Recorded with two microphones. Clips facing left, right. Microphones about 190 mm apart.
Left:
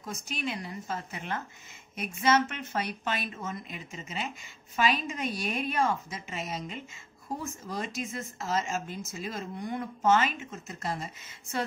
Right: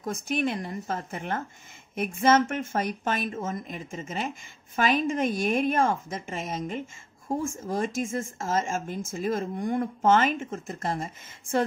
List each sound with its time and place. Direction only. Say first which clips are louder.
0.0 s speech: right 8 dB; 55° right (ahead or behind)